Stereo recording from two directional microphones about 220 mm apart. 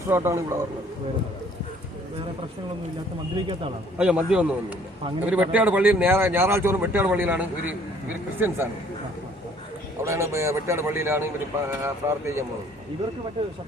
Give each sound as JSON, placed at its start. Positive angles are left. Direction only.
{"t": 0.1, "sound": "speech", "side_deg": -10}
{"t": 3.9, "sound": "a man's voice", "side_deg": -5}
{"t": 10.0, "sound": "speech", "side_deg": -15}